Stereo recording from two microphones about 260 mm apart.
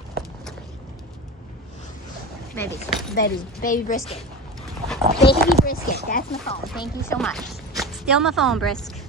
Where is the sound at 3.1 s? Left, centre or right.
Left.